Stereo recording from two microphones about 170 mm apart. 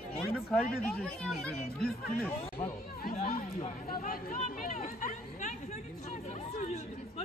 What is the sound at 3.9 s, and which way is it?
Chatter, 55° left (ahead or behind).